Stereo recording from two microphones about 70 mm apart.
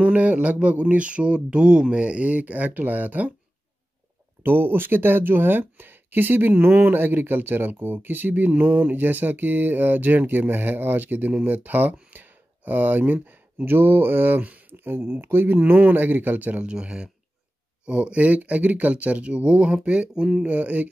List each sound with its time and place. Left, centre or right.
0.0 s speech: right
4.4 s speech: right